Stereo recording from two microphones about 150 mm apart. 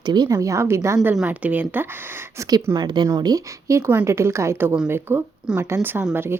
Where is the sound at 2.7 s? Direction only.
30° right (ahead or behind); by 6.3 s 10° right (ahead or behind).